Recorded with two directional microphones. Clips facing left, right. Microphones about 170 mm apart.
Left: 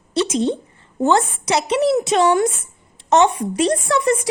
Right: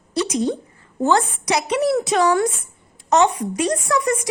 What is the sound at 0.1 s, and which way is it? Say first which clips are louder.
A woman's voice: left 2 dB; 25° left (ahead or behind).